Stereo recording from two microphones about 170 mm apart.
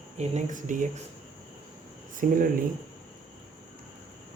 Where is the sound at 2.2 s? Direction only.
55° right (ahead or behind).